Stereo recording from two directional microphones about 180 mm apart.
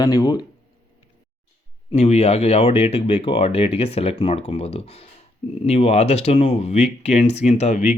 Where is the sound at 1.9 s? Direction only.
35° left (ahead or behind).